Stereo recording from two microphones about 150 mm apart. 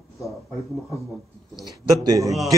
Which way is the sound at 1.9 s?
25° right (ahead or behind).